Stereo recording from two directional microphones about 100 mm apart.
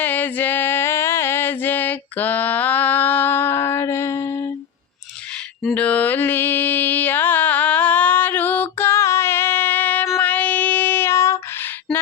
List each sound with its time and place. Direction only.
0.0 s a sound: 20° left (ahead or behind)
5.7 s mantra: 15° left (ahead or behind)
10.2 s child singing: 15° left (ahead or behind)